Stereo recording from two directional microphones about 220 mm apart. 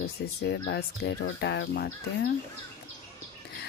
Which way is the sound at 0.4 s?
50° left (ahead or behind).